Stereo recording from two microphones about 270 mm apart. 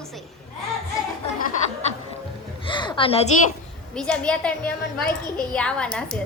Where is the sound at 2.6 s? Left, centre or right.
Centre.